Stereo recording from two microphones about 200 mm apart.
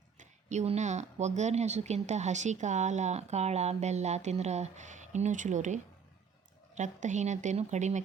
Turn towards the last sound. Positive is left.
turn(degrees=-35)  # may be behind; listen again after turning